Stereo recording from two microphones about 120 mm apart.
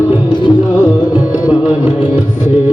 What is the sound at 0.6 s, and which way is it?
Music, 25° left (ahead or behind).